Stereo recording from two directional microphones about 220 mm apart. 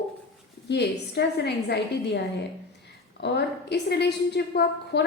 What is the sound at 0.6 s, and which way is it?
A woman's voice, 50° left (ahead or behind).